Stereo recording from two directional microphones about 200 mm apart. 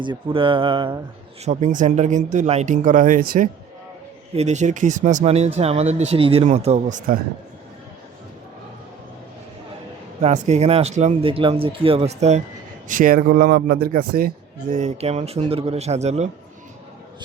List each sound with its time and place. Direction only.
0.0 s speech: 25° right (ahead or behind)
1.5 s a man's voice: 40° right (ahead or behind)
10.2 s a man's voice: 35° right (ahead or behind)
12.9 s a man's voice: 45° right (ahead or behind)